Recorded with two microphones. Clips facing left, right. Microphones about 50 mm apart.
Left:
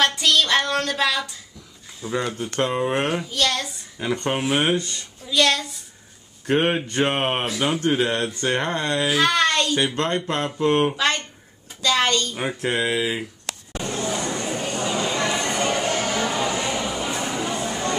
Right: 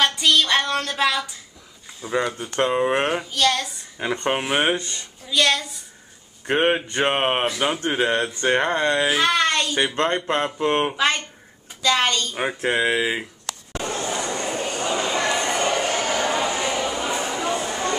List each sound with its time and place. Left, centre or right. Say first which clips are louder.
0.0 s a sound: even; centre
2.0 s speech: right 2 dB; centre
4.0 s speech: even; centre
5.2 s a woman's voice: even; centre
6.4 s speech: right 1 dB; centre
9.2 s speech: left 1 dB; centre
9.9 s speech: right 2 dB; right
10.9 s a woman's voice: right 1 dB; centre
12.4 s speech: right 2 dB; centre
13.7 s a sound: even; right
14.1 s a sound: even; centre
15.0 s music: right 1 dB; centre
16.3 s a sound: right 1 dB; centre